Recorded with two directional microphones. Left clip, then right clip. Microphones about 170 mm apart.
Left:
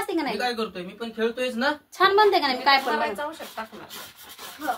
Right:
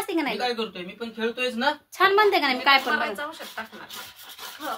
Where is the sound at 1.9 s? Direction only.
25° right (ahead or behind).